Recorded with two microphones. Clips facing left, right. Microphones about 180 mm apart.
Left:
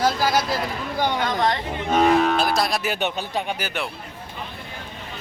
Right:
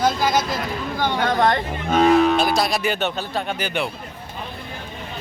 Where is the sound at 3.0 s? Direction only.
15° left (ahead or behind).